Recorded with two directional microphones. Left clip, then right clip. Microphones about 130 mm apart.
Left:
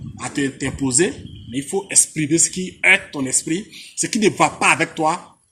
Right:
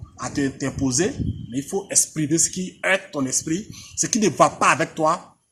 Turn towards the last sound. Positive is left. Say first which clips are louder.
# left 2 dB
turn(degrees=-40)  # may be behind; listen again after turning